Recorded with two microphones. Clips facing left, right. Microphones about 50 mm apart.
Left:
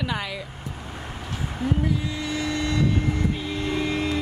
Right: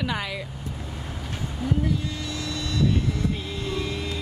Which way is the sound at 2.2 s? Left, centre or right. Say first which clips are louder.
Left 5 dB; left.